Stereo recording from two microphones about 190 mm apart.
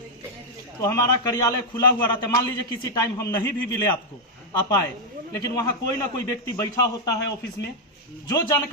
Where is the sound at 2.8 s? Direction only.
20° left (ahead or behind).